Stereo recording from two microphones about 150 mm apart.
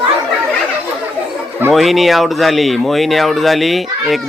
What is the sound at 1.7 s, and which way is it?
Speech, centre (ahead or behind).